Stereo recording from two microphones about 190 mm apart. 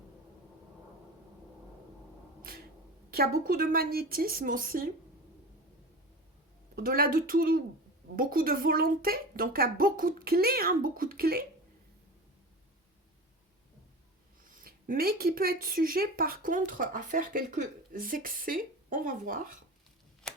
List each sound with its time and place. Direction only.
3.1 s speech: 50° right (ahead or behind)
6.7 s speech: 50° right (ahead or behind)
14.4 s speech: 45° right (ahead or behind)
20.2 s a sound: 5° left (ahead or behind)